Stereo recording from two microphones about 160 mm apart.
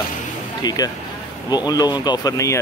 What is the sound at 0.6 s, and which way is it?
Speech, 25° left (ahead or behind).